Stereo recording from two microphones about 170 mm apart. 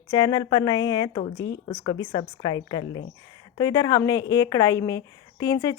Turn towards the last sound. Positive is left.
turn(degrees=20)  # may be behind; listen again after turning